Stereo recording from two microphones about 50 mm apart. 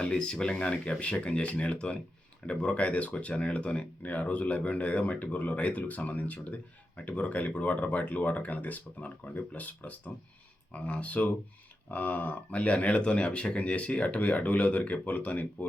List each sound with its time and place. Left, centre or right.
0.0 s speech: centre